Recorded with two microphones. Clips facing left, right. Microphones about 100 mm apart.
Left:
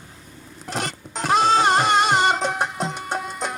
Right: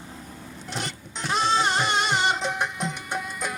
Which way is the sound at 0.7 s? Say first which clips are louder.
Left 6 dB; 40° left (ahead or behind).